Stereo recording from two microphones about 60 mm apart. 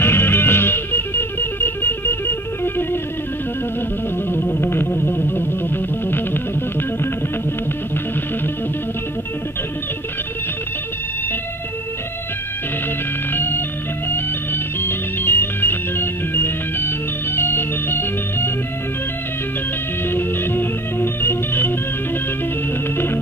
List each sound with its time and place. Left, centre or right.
0.0 s music: left
4.3 s music: left
13.3 s organ: left
20.1 s organ: left